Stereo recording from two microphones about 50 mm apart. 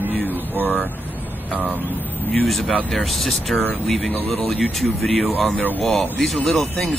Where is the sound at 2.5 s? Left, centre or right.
Centre.